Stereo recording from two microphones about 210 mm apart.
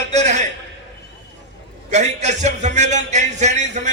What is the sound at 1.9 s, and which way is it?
A man's voice, 35° right (ahead or behind).